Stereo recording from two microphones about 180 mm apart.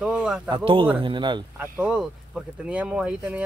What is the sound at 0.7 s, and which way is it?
Speech, 30° right (ahead or behind).